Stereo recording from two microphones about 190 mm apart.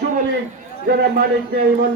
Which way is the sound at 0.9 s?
60° right (ahead or behind).